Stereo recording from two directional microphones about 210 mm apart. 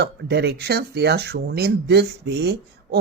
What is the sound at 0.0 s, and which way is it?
Speech, 50° right (ahead or behind).